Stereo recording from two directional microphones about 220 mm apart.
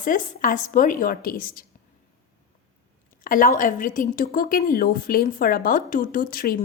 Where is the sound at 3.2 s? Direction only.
40° left (ahead or behind).